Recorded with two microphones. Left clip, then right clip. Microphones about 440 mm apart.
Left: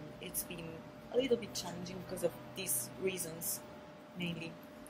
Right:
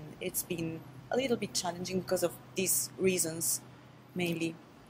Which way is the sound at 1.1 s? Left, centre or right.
Right.